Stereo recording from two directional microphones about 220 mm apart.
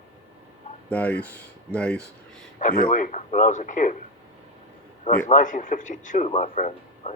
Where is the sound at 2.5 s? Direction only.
35° left (ahead or behind).